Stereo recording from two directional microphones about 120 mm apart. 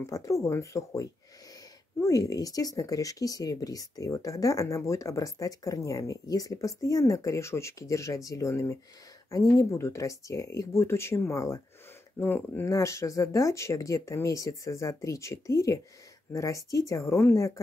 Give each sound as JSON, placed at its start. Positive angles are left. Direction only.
{"t": 0.0, "sound": "speech", "side_deg": 25}